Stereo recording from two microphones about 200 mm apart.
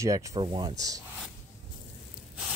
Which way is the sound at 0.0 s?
15° right (ahead or behind).